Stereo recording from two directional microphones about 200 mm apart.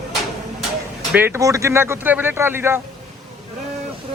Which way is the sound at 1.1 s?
10° right (ahead or behind).